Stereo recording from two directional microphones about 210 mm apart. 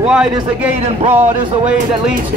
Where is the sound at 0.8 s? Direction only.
30° right (ahead or behind).